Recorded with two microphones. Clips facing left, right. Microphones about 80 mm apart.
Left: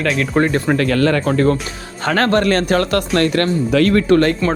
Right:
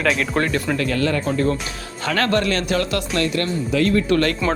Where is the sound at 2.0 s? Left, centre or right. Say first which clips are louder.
Left 5 dB; left.